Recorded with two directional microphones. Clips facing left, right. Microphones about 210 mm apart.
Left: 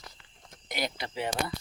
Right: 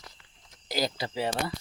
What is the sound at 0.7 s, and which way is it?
Speech, 30° right (ahead or behind).